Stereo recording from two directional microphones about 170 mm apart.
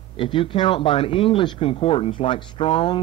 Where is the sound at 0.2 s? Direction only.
30° left (ahead or behind).